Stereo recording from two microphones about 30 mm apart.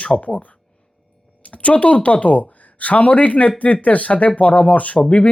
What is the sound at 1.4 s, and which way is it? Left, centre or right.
Speech, left.